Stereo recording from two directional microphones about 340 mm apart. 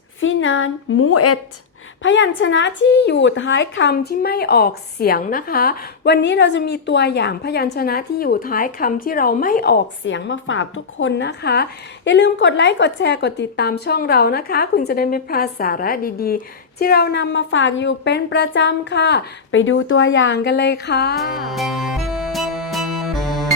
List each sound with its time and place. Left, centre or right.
0.2 s a woman's voice: left
2.0 s a woman's voice: left
21.2 s music: centre